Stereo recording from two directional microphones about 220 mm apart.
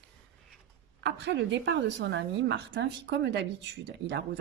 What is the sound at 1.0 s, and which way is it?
A woman's voice, 55° right (ahead or behind).